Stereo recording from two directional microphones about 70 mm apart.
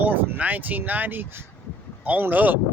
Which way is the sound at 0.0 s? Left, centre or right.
Right.